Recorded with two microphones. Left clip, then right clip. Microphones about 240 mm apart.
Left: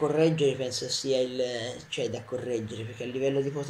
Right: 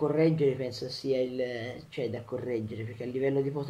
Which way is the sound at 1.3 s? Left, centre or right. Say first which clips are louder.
Left 3 dB; left.